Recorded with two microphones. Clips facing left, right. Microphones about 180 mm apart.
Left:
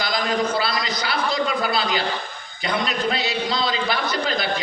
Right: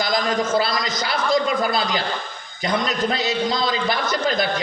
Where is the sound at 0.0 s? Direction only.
45° right (ahead or behind).